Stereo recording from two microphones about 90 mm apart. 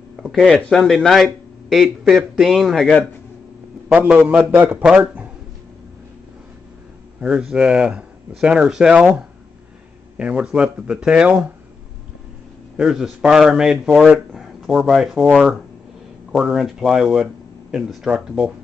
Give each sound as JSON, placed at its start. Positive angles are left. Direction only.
{"t": 0.2, "sound": "speech", "side_deg": 0}
{"t": 3.9, "sound": "speech", "side_deg": -15}
{"t": 7.2, "sound": "speech", "side_deg": -10}
{"t": 12.7, "sound": "speech", "side_deg": -5}